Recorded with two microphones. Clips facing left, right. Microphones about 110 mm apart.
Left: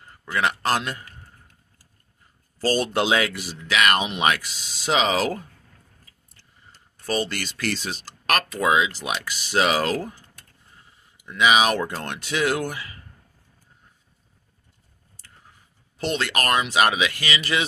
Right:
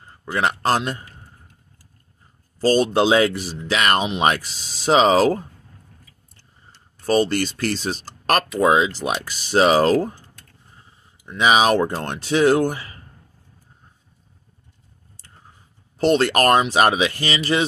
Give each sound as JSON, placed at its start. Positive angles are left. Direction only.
{"t": 0.2, "sound": "a man's voice", "side_deg": -30}
{"t": 2.6, "sound": "speech", "side_deg": -25}
{"t": 7.1, "sound": "speech", "side_deg": -35}
{"t": 16.0, "sound": "speech", "side_deg": -40}